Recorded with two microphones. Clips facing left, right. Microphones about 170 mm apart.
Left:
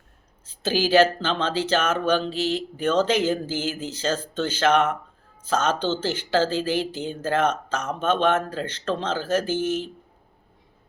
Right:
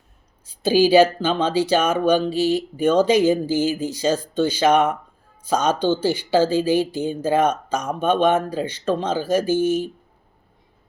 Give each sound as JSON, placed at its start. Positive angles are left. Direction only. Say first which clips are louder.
{"t": 0.4, "sound": "speech", "louder": "right 7 dB", "side_deg": -15}